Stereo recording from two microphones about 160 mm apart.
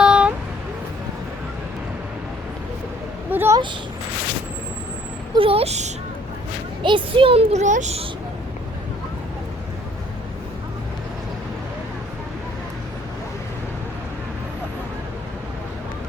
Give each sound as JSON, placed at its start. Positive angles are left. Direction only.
{"t": 0.0, "sound": "vehicle", "side_deg": -5}
{"t": 3.2, "sound": "a sound", "side_deg": -15}
{"t": 5.3, "sound": "speech", "side_deg": -35}
{"t": 6.8, "sound": "speech", "side_deg": -30}